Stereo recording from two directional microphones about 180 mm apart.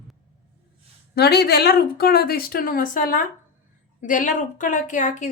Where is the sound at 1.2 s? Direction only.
65° left (ahead or behind).